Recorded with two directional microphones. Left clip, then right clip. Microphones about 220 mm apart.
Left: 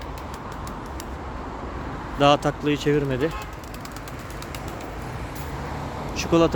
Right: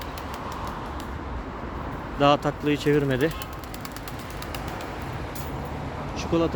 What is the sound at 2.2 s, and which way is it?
Speech, 10° left (ahead or behind).